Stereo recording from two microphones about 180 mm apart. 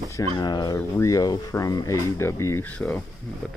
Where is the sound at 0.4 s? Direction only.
25° left (ahead or behind).